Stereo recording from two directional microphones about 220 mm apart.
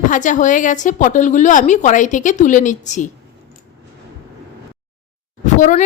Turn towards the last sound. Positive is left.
turn(degrees=35)  # may be behind; listen again after turning